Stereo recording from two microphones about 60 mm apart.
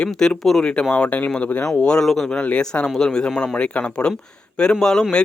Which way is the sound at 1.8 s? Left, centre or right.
Centre.